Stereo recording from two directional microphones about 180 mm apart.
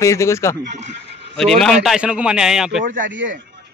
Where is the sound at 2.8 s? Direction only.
45° right (ahead or behind).